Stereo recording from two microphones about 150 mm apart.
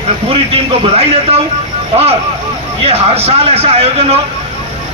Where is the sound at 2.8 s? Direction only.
45° right (ahead or behind).